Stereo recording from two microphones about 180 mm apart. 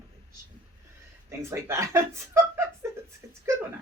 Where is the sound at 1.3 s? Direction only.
15° right (ahead or behind).